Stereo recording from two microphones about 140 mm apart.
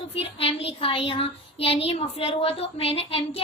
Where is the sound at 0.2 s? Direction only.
40° left (ahead or behind).